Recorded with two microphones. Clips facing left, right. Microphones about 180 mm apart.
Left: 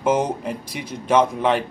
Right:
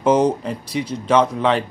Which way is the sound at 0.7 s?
50° left (ahead or behind).